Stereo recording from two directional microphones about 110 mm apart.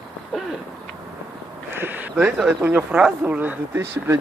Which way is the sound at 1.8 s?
15° right (ahead or behind).